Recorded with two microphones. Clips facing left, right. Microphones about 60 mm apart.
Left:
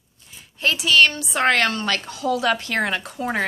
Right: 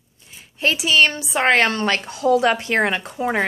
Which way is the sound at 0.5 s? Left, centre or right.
Centre.